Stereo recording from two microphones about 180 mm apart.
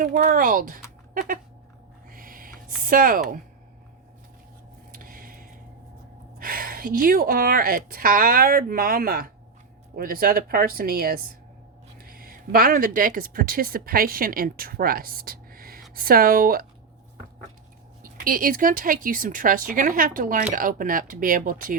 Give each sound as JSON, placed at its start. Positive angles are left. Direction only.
{"t": 0.0, "sound": "speech", "side_deg": -45}
{"t": 1.1, "sound": "cat", "side_deg": -50}
{"t": 2.0, "sound": "a sound", "side_deg": -50}
{"t": 4.9, "sound": "a sound", "side_deg": -50}
{"t": 6.4, "sound": "speech", "side_deg": -55}
{"t": 18.2, "sound": "speech", "side_deg": -50}